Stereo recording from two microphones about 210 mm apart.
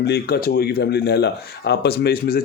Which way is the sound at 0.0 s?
50° left (ahead or behind).